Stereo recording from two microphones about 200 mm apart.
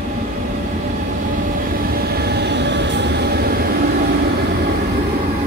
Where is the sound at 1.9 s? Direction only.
50° right (ahead or behind).